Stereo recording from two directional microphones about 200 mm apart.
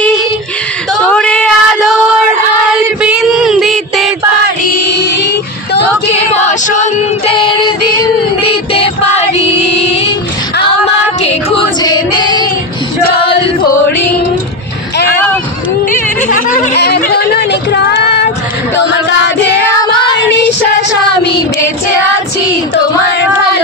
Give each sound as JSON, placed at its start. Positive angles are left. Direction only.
{"t": 1.0, "sound": "female singing", "side_deg": 5}
{"t": 2.7, "sound": "music", "side_deg": -5}
{"t": 6.0, "sound": "music", "side_deg": 35}
{"t": 7.3, "sound": "music", "side_deg": 25}
{"t": 11.2, "sound": "female singing", "side_deg": 25}
{"t": 15.9, "sound": "a sound", "side_deg": 45}
{"t": 19.6, "sound": "child singing", "side_deg": 15}